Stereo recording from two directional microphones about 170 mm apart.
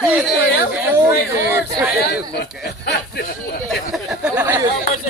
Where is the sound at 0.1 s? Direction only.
10° right (ahead or behind).